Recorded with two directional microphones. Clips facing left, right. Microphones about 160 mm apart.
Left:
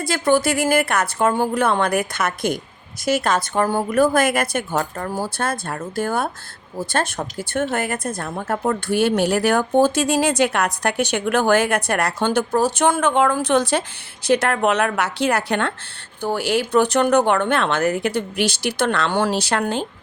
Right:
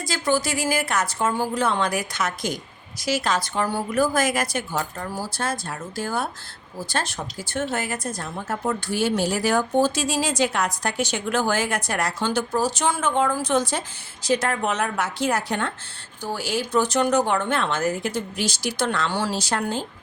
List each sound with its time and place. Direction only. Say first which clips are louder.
0.0 s a woman's voice: left 5 dB; 55° left (ahead or behind)